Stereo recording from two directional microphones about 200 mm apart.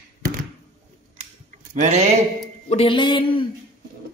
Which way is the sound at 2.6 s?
30° left (ahead or behind).